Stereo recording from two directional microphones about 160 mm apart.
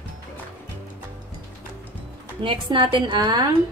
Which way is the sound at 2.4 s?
30° right (ahead or behind).